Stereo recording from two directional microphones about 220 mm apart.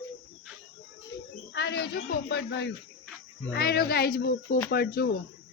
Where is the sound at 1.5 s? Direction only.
50° left (ahead or behind).